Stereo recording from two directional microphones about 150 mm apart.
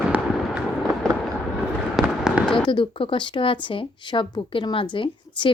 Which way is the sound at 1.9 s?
5° right (ahead or behind).